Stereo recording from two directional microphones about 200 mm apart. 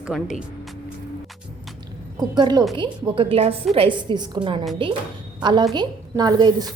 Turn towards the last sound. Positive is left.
turn(degrees=-20)  # may be behind; listen again after turning